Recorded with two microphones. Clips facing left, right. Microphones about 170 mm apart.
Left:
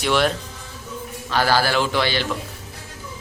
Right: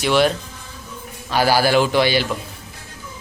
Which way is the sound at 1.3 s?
15° right (ahead or behind).